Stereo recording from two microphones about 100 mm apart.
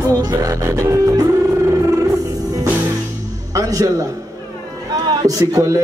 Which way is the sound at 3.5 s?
35° right (ahead or behind).